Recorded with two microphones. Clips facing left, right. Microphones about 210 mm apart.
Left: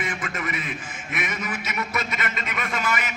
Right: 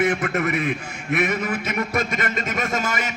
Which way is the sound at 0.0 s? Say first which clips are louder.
Right 10 dB; 65° right (ahead or behind).